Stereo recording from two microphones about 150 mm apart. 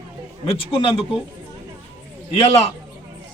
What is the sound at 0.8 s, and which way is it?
Speech, 40° left (ahead or behind).